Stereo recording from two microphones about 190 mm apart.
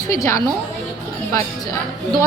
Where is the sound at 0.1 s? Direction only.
15° left (ahead or behind).